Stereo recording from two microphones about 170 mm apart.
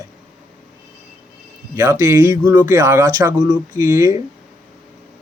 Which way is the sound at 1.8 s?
15° right (ahead or behind).